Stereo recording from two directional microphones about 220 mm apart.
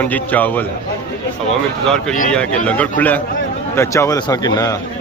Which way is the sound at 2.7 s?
5° left (ahead or behind).